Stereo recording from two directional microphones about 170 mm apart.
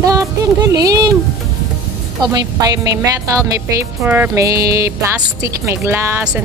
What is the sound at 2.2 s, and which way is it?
Speech, 20° right (ahead or behind).